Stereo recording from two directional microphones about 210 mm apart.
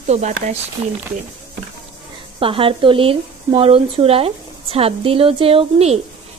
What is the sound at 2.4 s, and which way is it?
Speech, 25° right (ahead or behind).